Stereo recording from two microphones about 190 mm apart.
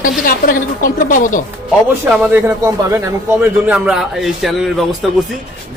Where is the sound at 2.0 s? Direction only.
10° right (ahead or behind).